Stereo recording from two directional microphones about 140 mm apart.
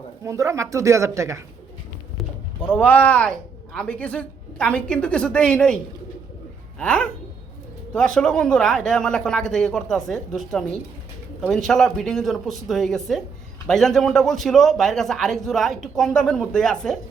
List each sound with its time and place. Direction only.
0.3 s speech: 20° right (ahead or behind)
2.1 s a man's voice: 5° left (ahead or behind)